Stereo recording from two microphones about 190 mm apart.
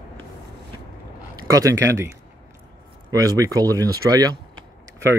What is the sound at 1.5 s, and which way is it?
Speech, 15° right (ahead or behind).